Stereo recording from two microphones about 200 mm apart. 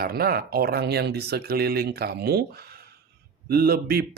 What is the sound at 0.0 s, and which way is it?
Speech, 50° right (ahead or behind).